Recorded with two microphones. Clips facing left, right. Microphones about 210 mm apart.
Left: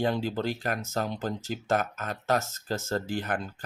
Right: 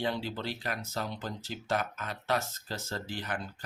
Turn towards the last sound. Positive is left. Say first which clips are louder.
# left 7 dB
turn(degrees=50)  # may be behind; listen again after turning